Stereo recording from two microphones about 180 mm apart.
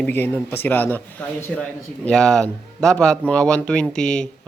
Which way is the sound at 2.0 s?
5° left (ahead or behind).